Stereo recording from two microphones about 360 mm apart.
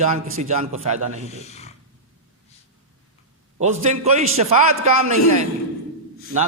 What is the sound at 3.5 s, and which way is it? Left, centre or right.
Speech, centre.